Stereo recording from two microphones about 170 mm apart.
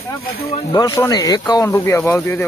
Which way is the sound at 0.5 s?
25° left (ahead or behind).